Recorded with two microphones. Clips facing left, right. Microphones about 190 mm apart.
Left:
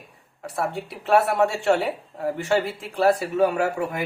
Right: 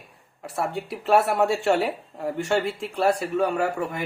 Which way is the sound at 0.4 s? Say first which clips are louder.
Left 1 dB; centre (ahead or behind).